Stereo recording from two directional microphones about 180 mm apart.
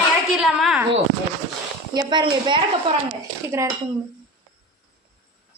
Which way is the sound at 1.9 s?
25° right (ahead or behind).